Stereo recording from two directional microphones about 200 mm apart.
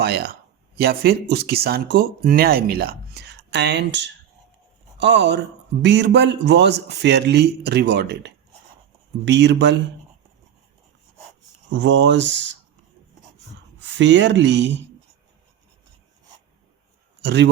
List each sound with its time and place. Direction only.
0.0 s a man's voice: 55° right (ahead or behind)
11.7 s a man's voice: 65° right (ahead or behind)
13.7 s speech: 65° right (ahead or behind)
17.2 s a man's voice: 60° right (ahead or behind)